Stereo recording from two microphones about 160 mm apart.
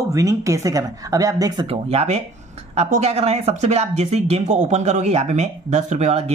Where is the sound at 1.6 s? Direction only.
40° right (ahead or behind).